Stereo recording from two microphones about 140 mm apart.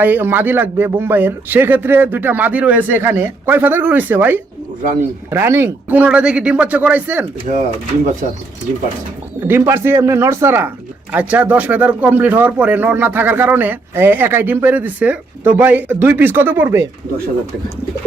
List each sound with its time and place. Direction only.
0.0 s speech: 15° right (ahead or behind)
7.5 s speech: 50° right (ahead or behind)
9.4 s speech: 15° right (ahead or behind)